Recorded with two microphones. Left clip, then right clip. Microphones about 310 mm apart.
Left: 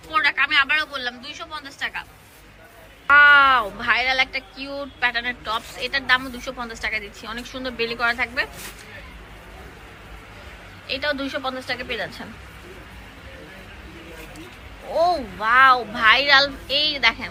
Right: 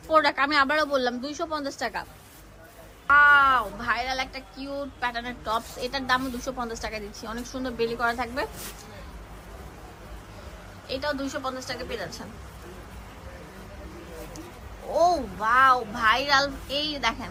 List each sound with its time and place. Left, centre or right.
0.1 s a woman's voice: centre
3.1 s speech: centre
10.8 s speech: centre
14.9 s speech: centre